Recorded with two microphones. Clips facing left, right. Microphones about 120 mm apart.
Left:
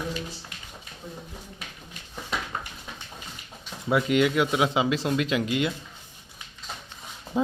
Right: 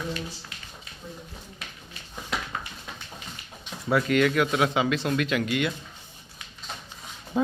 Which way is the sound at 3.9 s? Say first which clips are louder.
Even; 20° left (ahead or behind).